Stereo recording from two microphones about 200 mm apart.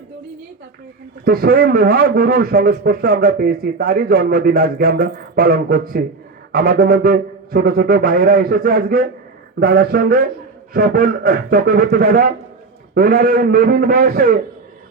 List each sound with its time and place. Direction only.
1.2 s a man's voice: 50° right (ahead or behind)